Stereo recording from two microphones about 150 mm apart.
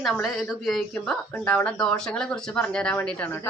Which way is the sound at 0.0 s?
Centre (ahead or behind).